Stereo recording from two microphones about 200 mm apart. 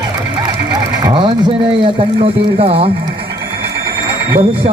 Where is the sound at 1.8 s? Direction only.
30° right (ahead or behind).